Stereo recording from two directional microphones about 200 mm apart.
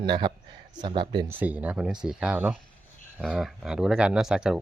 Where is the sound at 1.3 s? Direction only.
10° right (ahead or behind).